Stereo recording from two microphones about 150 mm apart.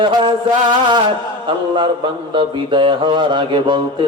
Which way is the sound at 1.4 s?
35° right (ahead or behind).